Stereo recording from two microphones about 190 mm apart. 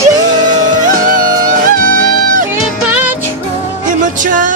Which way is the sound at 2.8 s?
10° right (ahead or behind).